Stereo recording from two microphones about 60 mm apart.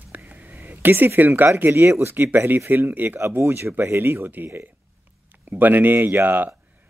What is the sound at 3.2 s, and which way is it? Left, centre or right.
Speech, right.